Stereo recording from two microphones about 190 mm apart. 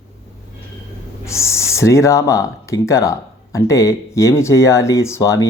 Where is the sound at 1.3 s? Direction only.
15° left (ahead or behind).